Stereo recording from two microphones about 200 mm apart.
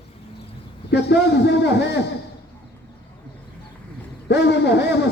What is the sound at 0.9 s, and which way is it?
Speech, 55° left (ahead or behind).